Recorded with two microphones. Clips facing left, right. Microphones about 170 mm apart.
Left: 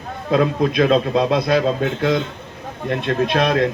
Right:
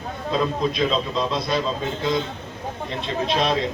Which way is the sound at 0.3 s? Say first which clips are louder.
Left 5 dB; 60° left (ahead or behind).